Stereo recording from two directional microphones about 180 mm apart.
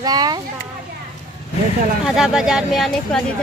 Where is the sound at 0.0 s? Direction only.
20° right (ahead or behind).